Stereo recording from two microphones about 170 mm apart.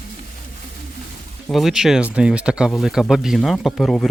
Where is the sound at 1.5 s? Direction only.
Centre (ahead or behind).